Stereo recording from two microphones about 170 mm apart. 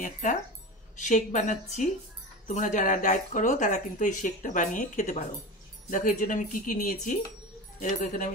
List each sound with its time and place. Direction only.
0.0 s speech: 50° left (ahead or behind)